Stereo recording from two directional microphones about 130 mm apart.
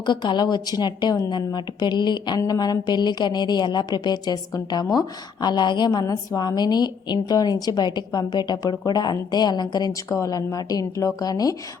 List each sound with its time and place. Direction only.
0.0 s a woman's voice: 35° left (ahead or behind)